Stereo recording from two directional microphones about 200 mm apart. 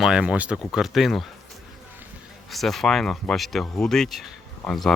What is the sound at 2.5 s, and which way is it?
Speech, centre (ahead or behind).